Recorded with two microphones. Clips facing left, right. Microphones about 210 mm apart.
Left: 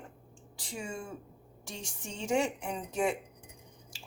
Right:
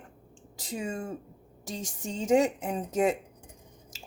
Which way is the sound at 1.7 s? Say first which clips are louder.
Right 7 dB; 90° right.